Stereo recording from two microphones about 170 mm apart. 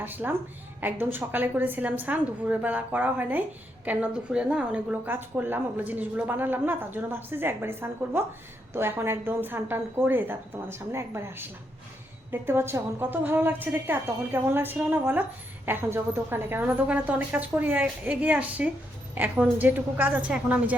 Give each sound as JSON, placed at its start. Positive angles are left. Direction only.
{"t": 0.0, "sound": "a woman's voice", "side_deg": -10}